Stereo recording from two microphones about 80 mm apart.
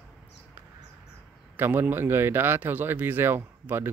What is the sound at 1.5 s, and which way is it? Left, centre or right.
Speech, right.